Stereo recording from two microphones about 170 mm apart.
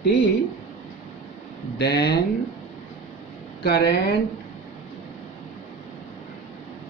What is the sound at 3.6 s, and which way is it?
Speech, 70° left (ahead or behind).